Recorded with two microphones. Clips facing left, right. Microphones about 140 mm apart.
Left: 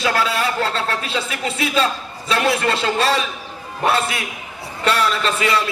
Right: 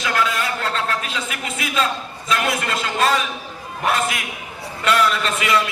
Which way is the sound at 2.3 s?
30° left (ahead or behind).